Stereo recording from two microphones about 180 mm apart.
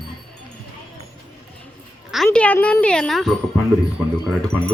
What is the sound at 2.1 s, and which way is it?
Speech, centre (ahead or behind).